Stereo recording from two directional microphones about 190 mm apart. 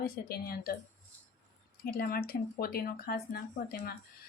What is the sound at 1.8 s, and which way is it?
Speech, 55° left (ahead or behind).